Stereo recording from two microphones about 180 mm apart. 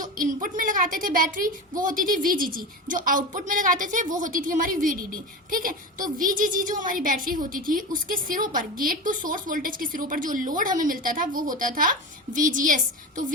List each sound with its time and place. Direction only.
0.0 s a child's voice: 45° right (ahead or behind)